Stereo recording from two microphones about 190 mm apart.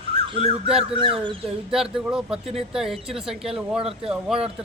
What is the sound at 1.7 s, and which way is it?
Speech, 5° right (ahead or behind).